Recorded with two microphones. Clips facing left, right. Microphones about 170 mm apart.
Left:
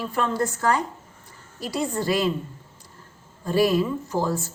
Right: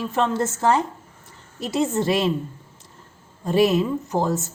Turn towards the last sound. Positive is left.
turn(degrees=-20)  # may be behind; listen again after turning